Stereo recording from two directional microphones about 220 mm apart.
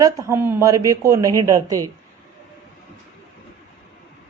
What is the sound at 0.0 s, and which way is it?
Speech, 15° right (ahead or behind).